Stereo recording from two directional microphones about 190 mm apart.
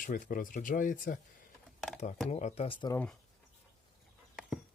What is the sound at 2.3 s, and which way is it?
Speech, 35° left (ahead or behind).